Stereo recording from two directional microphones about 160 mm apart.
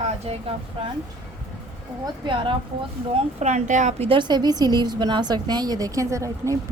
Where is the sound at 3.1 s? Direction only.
45° right (ahead or behind).